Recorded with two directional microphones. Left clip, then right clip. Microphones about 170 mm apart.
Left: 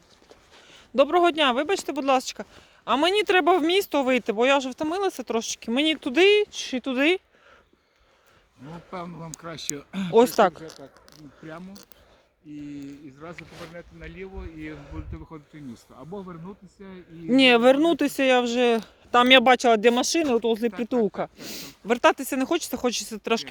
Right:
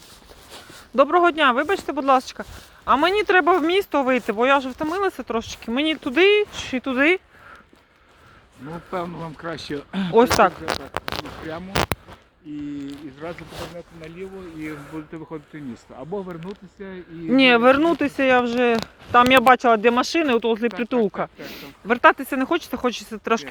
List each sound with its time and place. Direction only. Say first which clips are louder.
0.9 s speech: right 3 dB; 35° left (ahead or behind)
8.9 s speech: right 8 dB; 60° left (ahead or behind)
10.7 s speech: right 18 dB; 50° right (ahead or behind)
12.5 s speech: right 6 dB; 50° left (ahead or behind)
13.7 s speech: right 4 dB; 20° right (ahead or behind)
14.8 s speech: right 7 dB; 35° left (ahead or behind)
15.1 s speech: right 8 dB; 45° left (ahead or behind)